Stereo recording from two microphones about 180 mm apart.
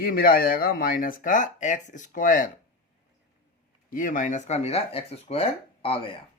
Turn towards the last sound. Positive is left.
turn(degrees=30)  # may be behind; listen again after turning